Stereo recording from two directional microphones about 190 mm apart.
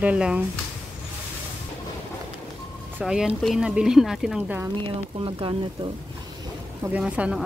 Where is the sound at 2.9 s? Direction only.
5° right (ahead or behind).